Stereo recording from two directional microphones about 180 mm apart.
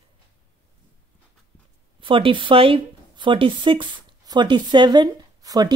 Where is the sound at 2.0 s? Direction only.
30° right (ahead or behind).